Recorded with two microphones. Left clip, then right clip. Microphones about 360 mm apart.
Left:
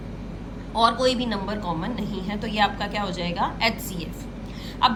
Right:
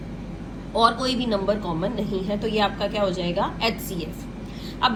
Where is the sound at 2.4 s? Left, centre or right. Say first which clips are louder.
Left 1 dB; left.